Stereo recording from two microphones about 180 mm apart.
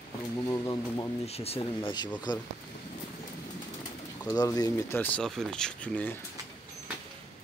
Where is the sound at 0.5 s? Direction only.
20° left (ahead or behind).